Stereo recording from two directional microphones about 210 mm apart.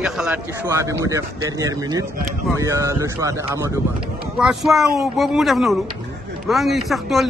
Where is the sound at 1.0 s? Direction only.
15° right (ahead or behind).